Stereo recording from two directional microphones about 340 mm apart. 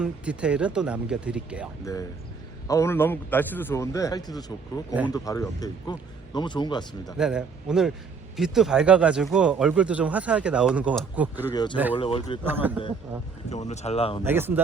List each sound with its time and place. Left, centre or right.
0.0 s speech: centre
1.8 s a man's voice: centre
7.2 s speech: centre
11.5 s a man's voice: centre
12.6 s speech: centre
13.5 s speech: centre
14.3 s speech: centre